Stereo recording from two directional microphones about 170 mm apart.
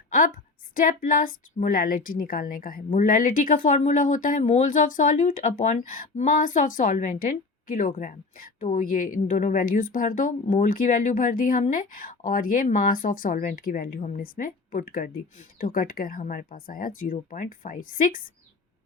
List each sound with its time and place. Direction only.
0.8 s a woman's voice: 55° left (ahead or behind)